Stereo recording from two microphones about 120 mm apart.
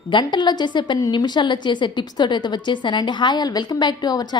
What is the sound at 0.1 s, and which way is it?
A woman's voice, 40° left (ahead or behind).